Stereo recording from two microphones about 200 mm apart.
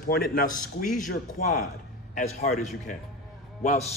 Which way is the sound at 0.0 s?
45° left (ahead or behind).